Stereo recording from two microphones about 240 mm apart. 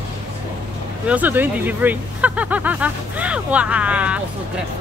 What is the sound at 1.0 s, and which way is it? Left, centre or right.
Speech, centre.